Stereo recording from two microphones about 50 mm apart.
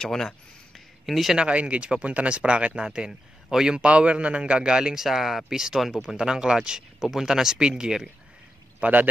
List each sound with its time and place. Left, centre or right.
0.0 s speech: centre
1.0 s speech: centre
1.3 s speech: right
5.0 s speech: centre
8.7 s pour: right